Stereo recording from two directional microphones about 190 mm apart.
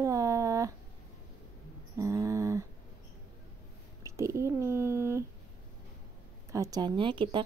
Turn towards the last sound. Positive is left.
turn(degrees=-25)  # may be behind; listen again after turning